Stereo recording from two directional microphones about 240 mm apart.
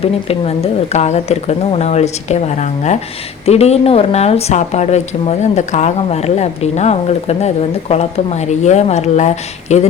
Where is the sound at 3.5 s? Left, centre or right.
Left.